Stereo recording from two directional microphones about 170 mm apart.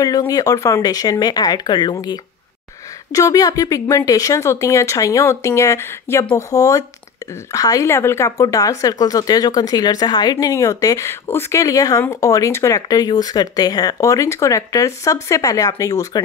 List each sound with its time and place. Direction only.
0.3 s speech: 20° left (ahead or behind)